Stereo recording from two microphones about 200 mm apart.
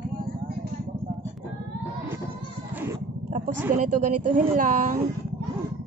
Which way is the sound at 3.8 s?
40° right (ahead or behind).